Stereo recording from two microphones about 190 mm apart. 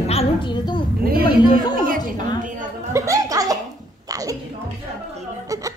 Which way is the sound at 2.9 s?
15° right (ahead or behind).